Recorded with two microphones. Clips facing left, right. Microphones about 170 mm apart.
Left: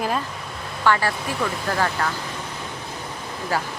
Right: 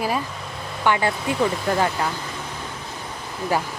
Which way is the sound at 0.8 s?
20° right (ahead or behind).